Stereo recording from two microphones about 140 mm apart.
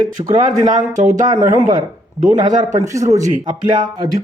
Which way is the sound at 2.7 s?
20° right (ahead or behind).